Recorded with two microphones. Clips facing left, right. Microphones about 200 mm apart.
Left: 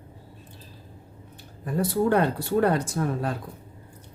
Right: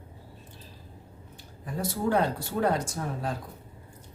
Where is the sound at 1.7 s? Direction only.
60° left (ahead or behind).